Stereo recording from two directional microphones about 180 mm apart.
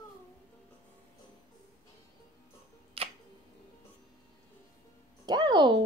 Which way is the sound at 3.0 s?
30° right (ahead or behind).